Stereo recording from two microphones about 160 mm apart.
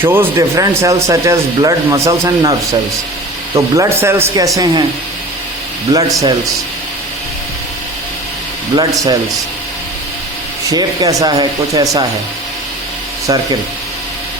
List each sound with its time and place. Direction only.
0.0 s speech: 15° right (ahead or behind)
5.9 s speech: 20° right (ahead or behind)
8.7 s speech: 25° right (ahead or behind)
10.7 s speech: 20° right (ahead or behind)